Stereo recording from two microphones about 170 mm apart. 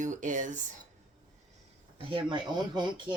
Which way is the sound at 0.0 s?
45° right (ahead or behind).